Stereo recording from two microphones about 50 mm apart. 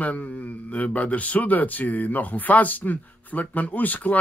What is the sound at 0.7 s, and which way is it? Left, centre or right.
Speech, left.